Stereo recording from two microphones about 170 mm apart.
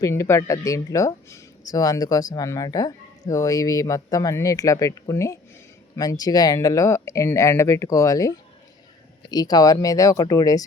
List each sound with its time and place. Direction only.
0.0 s speech: 15° left (ahead or behind)
9.3 s speech: 25° left (ahead or behind)